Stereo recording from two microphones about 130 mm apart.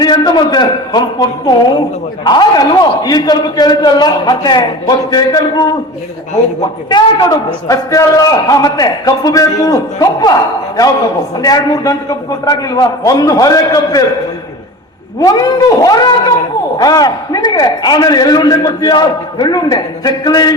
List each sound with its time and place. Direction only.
0.0 s a man's voice: 35° left (ahead or behind)
11.4 s a man's voice: 30° left (ahead or behind)
15.2 s a man's voice: 30° left (ahead or behind)